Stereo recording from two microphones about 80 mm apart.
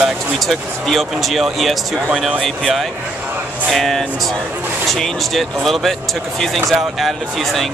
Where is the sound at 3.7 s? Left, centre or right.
Centre.